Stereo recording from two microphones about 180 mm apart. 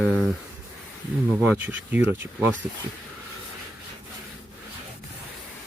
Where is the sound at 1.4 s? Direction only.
10° right (ahead or behind).